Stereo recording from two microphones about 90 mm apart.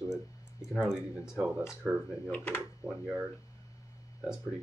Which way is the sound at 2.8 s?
20° right (ahead or behind).